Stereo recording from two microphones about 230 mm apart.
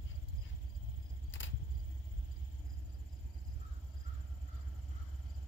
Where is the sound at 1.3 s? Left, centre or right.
Left.